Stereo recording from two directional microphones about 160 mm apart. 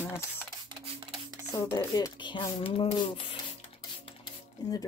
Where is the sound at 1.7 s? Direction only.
25° left (ahead or behind).